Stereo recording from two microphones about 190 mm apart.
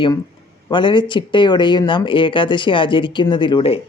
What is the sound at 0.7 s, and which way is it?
Speech, 25° left (ahead or behind).